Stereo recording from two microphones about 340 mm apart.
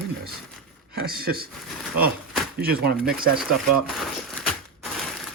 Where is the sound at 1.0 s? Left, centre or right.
Right.